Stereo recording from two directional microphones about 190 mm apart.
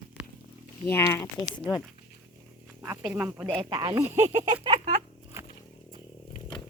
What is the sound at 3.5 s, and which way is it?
Speech, 25° right (ahead or behind).